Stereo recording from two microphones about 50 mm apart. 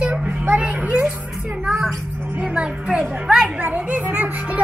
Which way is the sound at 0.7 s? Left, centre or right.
Right.